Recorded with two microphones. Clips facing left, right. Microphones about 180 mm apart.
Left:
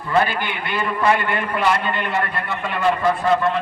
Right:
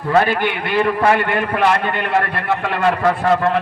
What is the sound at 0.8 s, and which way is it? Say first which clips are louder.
A man's voice: right 4 dB; 70° right (ahead or behind).